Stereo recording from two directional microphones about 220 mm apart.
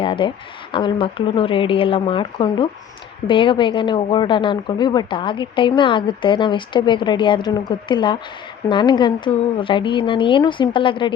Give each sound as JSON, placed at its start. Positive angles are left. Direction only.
{"t": 0.0, "sound": "speech", "side_deg": 25}